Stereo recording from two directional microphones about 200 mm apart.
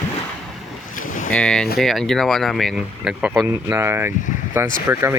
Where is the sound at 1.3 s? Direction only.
5° left (ahead or behind).